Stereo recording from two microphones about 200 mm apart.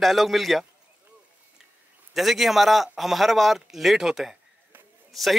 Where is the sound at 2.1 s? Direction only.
Centre (ahead or behind).